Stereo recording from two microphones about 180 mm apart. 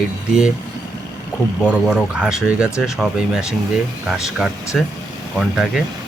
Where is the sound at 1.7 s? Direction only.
5° right (ahead or behind).